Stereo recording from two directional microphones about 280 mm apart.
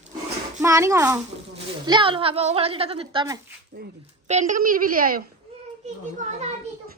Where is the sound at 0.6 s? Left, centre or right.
Centre.